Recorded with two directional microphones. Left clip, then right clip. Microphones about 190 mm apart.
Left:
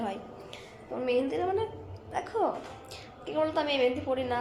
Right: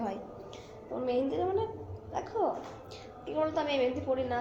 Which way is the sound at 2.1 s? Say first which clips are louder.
Left 2 dB; 20° left (ahead or behind).